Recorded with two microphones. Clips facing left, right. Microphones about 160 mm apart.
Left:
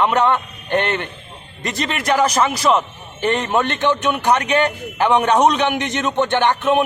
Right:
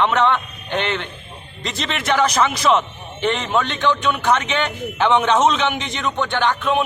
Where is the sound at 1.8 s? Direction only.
10° left (ahead or behind).